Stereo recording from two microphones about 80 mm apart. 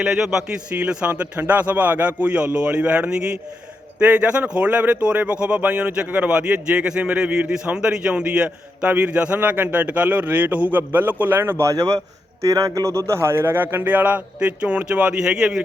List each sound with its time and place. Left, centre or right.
0.0 s a man's voice: centre; by 11.5 s right
12.5 s speech: right; by 15.6 s centre